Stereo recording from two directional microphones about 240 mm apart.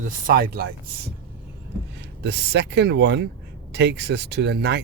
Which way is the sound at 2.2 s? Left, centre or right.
Right.